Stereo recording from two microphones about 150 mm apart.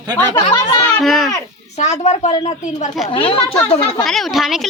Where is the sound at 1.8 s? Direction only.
50° left (ahead or behind).